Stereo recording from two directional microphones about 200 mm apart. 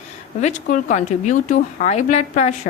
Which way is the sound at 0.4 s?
40° left (ahead or behind).